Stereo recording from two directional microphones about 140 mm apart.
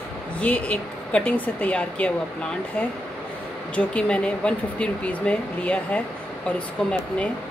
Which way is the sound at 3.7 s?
10° left (ahead or behind).